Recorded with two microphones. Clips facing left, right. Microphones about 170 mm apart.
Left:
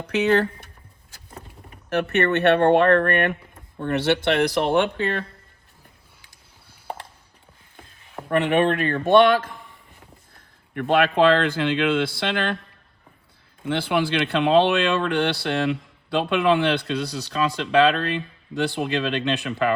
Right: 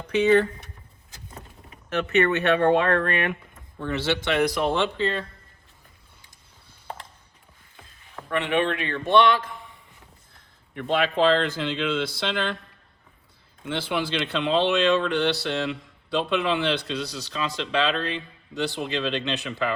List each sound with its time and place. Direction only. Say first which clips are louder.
2.1 s speech: left 2 dB; 60° left (ahead or behind)
8.3 s speech: left 5 dB; 50° left (ahead or behind)
10.8 s speech: left 4 dB; 55° left (ahead or behind)
13.7 s speech: left 5 dB; 55° left (ahead or behind)